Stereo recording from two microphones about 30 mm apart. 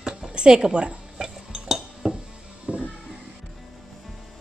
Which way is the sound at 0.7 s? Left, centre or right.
Right.